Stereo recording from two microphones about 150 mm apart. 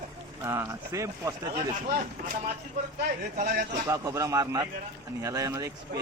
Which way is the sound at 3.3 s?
60° right (ahead or behind).